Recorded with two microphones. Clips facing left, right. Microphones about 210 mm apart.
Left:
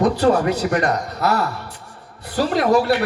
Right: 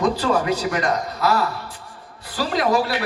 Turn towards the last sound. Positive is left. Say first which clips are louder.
# left 4 dB
turn(degrees=65)  # may be behind; listen again after turning